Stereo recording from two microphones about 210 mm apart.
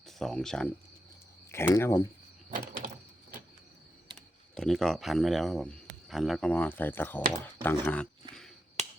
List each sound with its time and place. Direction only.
0.0 s speech: centre (ahead or behind)
2.5 s door: 40° right (ahead or behind)
4.5 s speech: centre (ahead or behind)